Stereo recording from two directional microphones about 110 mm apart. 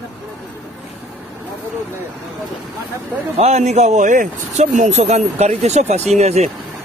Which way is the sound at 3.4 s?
90° right.